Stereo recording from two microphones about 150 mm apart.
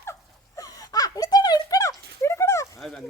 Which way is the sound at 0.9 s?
25° left (ahead or behind).